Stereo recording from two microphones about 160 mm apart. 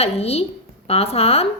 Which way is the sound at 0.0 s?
40° left (ahead or behind).